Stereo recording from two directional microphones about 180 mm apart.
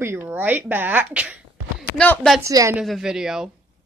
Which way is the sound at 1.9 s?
5° left (ahead or behind).